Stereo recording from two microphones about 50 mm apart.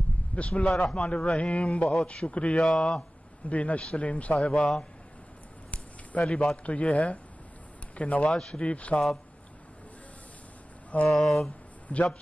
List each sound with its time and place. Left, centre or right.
0.4 s a man's voice: left
2.6 s speech: centre
3.4 s a man's voice: left
6.2 s a man's voice: left
8.3 s speech: centre
8.5 s a man's voice: left
11.1 s speech: centre
11.9 s a man's voice: left